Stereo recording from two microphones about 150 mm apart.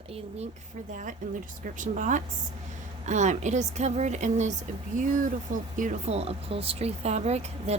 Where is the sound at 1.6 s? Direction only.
60° right (ahead or behind).